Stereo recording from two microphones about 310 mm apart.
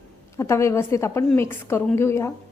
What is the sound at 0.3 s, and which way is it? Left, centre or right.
A woman's voice, centre.